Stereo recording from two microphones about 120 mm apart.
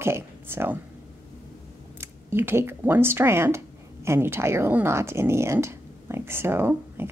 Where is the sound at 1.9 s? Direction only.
20° right (ahead or behind).